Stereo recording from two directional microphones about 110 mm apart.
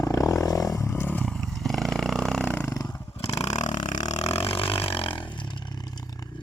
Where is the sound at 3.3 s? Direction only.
75° left (ahead or behind).